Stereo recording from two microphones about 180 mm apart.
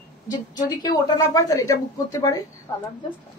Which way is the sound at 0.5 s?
25° left (ahead or behind).